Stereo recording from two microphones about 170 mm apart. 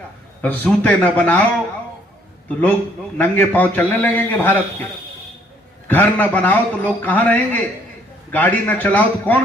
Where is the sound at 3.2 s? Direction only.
10° left (ahead or behind).